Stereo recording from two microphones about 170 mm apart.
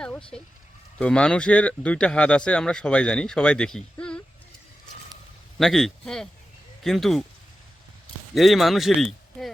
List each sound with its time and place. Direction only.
0.0 s a sound: 5° left (ahead or behind)
0.9 s speech: 5° left (ahead or behind)
5.5 s speech: centre (ahead or behind)
8.4 s speech: centre (ahead or behind)